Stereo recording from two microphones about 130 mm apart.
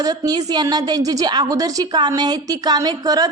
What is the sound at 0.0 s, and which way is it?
A woman's voice, 30° right (ahead or behind).